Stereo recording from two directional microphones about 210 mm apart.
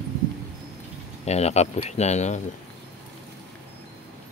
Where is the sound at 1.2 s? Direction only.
30° left (ahead or behind).